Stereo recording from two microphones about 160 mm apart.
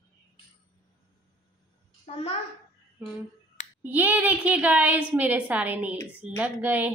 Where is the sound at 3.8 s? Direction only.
10° right (ahead or behind).